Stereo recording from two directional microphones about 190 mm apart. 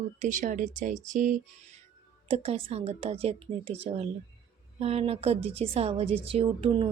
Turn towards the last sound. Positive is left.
turn(degrees=-30)  # may be behind; listen again after turning